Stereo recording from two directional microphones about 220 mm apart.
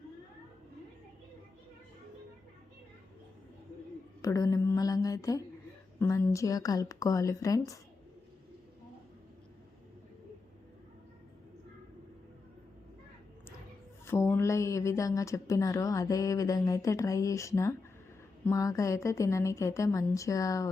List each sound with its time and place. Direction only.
4.2 s speech: 15° left (ahead or behind)
14.1 s speech: 10° left (ahead or behind)